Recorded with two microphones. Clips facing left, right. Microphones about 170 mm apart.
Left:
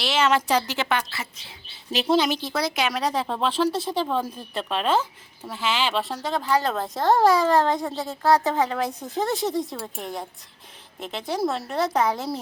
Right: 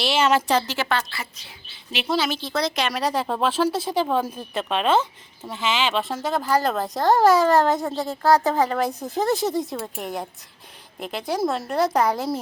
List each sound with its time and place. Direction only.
0.0 s a sound: 5° right (ahead or behind)
0.4 s a woman's voice: 15° left (ahead or behind)
1.9 s a woman's voice: 40° left (ahead or behind)
2.2 s a woman's voice: 15° left (ahead or behind); by 4.3 s 10° right (ahead or behind)
5.5 s speech: 5° left (ahead or behind)